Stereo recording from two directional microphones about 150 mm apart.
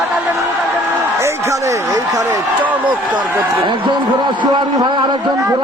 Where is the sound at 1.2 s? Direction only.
20° right (ahead or behind).